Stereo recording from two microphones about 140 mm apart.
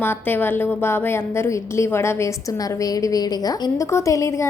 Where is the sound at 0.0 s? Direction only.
15° left (ahead or behind).